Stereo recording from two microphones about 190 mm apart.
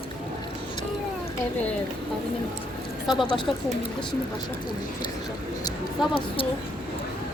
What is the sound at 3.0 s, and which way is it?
Speech, centre (ahead or behind).